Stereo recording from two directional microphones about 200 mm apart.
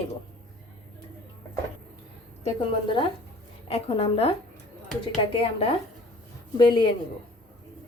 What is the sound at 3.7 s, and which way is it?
Speech, 30° left (ahead or behind).